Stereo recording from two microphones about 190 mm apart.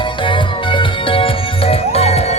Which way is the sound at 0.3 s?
25° left (ahead or behind).